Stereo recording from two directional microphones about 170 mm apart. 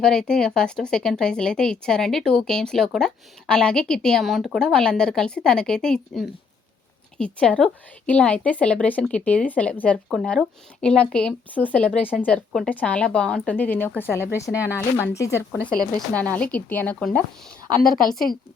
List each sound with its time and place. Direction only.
0.0 s speech: 5° left (ahead or behind)